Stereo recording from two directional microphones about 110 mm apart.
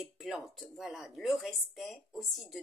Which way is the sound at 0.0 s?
5° right (ahead or behind).